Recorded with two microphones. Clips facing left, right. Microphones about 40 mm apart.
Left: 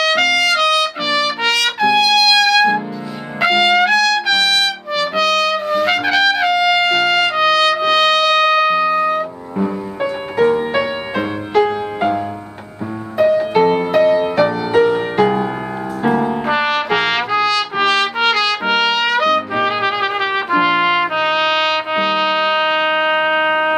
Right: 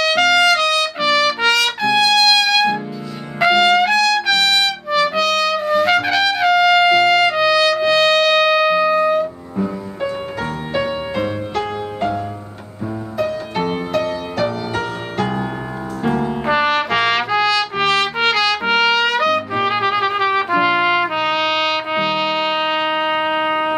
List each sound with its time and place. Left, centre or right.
0.0 s trumpet: centre
10.0 s music: centre
13.2 s music: centre
16.0 s trumpet: centre